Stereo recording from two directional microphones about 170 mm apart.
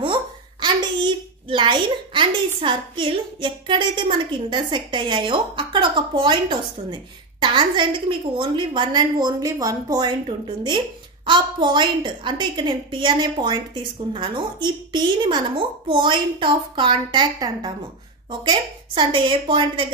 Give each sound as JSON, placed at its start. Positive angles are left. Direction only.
{"t": 0.0, "sound": "a child's voice", "side_deg": -25}